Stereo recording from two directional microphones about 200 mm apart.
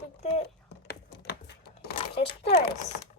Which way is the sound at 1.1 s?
55° left (ahead or behind).